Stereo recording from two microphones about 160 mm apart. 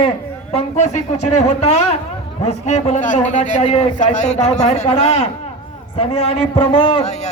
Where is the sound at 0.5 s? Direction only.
45° left (ahead or behind).